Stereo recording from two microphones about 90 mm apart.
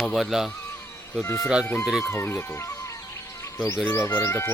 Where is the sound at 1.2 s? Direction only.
35° left (ahead or behind).